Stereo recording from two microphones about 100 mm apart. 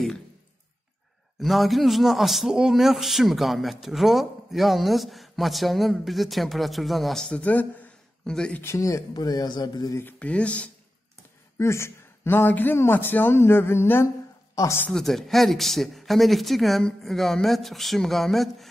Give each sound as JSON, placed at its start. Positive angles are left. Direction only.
{"t": 1.4, "sound": "a man's voice", "side_deg": 0}
{"t": 8.5, "sound": "speech", "side_deg": 30}
{"t": 10.1, "sound": "speech", "side_deg": 10}
{"t": 11.5, "sound": "speech", "side_deg": 25}
{"t": 14.5, "sound": "a sound", "side_deg": 35}
{"t": 14.9, "sound": "a man's voice", "side_deg": 5}